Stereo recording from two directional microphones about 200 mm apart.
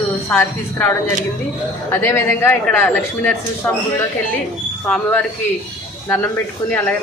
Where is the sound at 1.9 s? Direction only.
15° left (ahead or behind).